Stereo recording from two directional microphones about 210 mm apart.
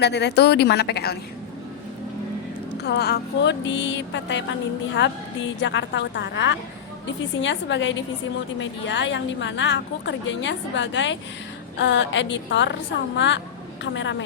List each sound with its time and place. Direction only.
0.0 s a woman's voice: 55° left (ahead or behind)
2.7 s a woman's voice: 50° left (ahead or behind)